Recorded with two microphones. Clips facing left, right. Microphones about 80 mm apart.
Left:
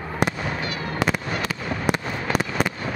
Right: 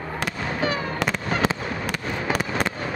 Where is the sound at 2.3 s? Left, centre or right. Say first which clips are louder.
Left 2 dB; centre.